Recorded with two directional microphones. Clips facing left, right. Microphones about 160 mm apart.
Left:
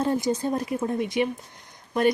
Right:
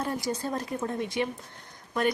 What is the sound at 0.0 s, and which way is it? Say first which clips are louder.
Speech: left 6 dB; 25° left (ahead or behind).